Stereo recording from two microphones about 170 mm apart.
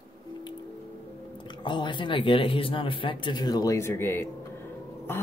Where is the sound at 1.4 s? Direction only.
30° left (ahead or behind).